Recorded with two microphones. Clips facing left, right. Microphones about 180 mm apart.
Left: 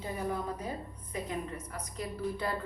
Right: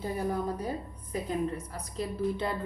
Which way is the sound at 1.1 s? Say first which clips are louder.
Right 6 dB; 35° right (ahead or behind).